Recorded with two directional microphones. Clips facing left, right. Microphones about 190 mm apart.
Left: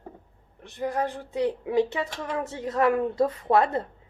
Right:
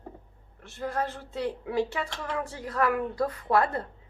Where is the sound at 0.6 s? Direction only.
15° left (ahead or behind).